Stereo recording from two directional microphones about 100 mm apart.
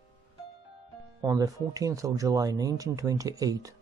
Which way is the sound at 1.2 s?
35° right (ahead or behind).